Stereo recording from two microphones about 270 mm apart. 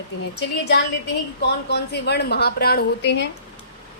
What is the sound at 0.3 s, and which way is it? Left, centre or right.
A woman's voice, left.